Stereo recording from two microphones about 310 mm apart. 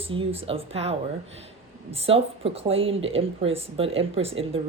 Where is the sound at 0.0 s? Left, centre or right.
Centre.